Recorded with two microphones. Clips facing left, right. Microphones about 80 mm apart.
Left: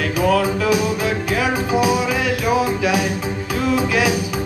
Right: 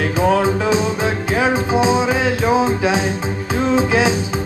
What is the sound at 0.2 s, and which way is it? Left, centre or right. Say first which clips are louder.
Music: right 1 dB; right.